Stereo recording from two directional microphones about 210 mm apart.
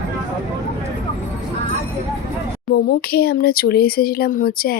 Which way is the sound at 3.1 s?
45° left (ahead or behind).